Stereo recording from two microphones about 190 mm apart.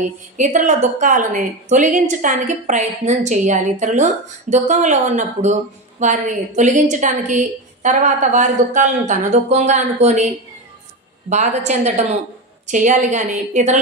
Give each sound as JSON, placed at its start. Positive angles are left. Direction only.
{"t": 0.0, "sound": "a woman's voice", "side_deg": -40}